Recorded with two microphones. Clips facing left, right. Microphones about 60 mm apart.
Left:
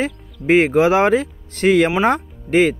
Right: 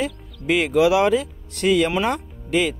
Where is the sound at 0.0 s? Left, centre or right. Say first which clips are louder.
Left 3 dB; left.